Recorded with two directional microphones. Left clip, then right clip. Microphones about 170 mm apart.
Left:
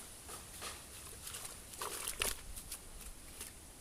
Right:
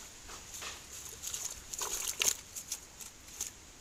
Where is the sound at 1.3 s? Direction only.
90° right.